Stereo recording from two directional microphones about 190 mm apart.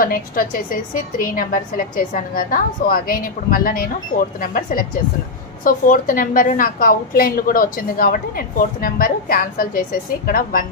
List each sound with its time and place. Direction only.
0.0 s a woman's voice: 50° left (ahead or behind)